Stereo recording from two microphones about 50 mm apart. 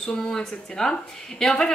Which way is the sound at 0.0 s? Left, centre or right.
Centre.